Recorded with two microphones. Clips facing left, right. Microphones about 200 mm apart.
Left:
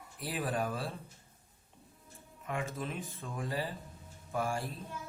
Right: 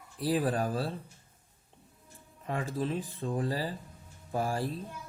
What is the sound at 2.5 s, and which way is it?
Speech, 35° right (ahead or behind).